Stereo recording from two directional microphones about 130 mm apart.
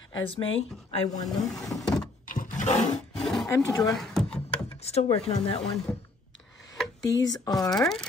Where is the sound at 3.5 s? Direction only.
25° left (ahead or behind).